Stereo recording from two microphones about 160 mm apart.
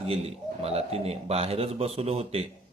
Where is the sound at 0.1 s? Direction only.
40° right (ahead or behind).